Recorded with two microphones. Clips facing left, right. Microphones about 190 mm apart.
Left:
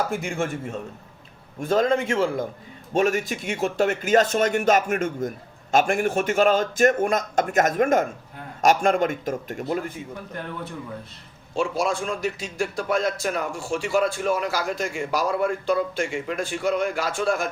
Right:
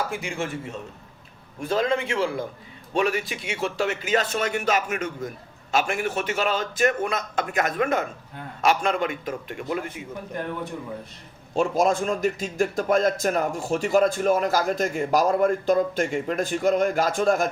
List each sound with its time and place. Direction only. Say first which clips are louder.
0.1 s speech: left 3 dB; 50° left (ahead or behind)
11.5 s a man's voice: right 3 dB; 45° right (ahead or behind)